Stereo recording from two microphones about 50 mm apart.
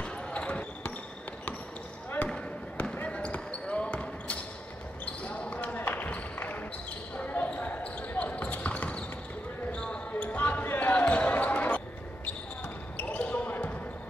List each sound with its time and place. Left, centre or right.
0.0 s basketball bounce: left
2.3 s a sound: left
5.0 s basketball bounce: left